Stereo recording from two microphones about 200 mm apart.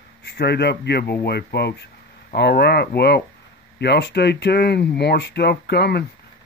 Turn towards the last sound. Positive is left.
turn(degrees=55)  # may be behind; listen again after turning